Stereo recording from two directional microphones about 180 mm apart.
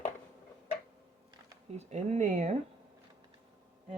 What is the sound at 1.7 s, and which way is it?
Speech, 40° right (ahead or behind).